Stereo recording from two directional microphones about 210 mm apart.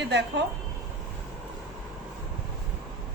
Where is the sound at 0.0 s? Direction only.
55° right (ahead or behind).